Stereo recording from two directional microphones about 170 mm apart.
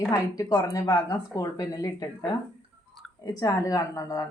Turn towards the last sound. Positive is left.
turn(degrees=20)  # may be behind; listen again after turning